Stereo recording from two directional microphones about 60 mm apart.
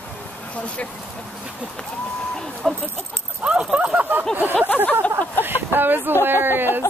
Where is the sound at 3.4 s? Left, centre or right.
Centre.